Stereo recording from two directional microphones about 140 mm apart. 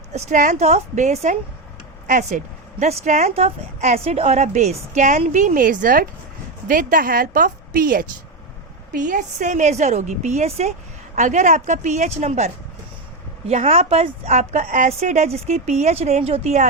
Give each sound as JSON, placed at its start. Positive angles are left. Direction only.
{"t": 0.1, "sound": "a woman's voice", "side_deg": -55}
{"t": 8.9, "sound": "a woman's voice", "side_deg": -65}
{"t": 13.5, "sound": "speech", "side_deg": -50}